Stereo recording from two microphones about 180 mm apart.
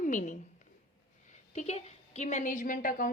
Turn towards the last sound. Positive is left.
turn(degrees=50)  # may be behind; listen again after turning